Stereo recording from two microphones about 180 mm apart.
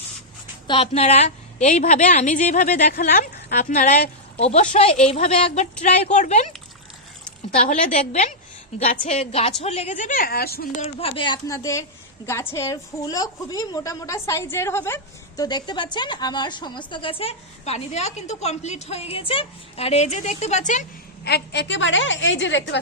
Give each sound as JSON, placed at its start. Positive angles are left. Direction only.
{"t": 0.7, "sound": "a woman's voice", "side_deg": 35}
{"t": 4.4, "sound": "a woman's voice", "side_deg": 35}
{"t": 7.5, "sound": "a woman's voice", "side_deg": 40}
{"t": 10.8, "sound": "a woman's voice", "side_deg": 35}
{"t": 21.2, "sound": "a woman's voice", "side_deg": 65}